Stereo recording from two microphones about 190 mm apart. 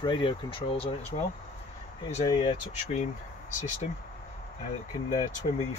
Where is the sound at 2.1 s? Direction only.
30° left (ahead or behind).